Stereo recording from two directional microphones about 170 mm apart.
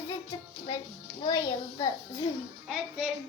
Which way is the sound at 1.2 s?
25° left (ahead or behind).